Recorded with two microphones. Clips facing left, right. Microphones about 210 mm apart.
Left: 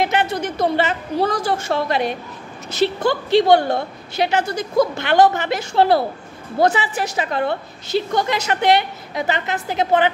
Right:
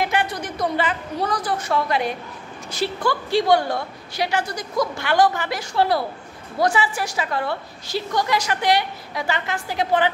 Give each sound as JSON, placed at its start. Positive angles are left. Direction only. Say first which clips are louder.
{"t": 0.0, "sound": "a woman's voice", "louder": "left 4 dB", "side_deg": 20}